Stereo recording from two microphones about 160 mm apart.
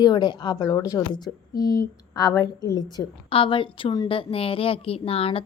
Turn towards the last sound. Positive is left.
turn(degrees=35)  # may be behind; listen again after turning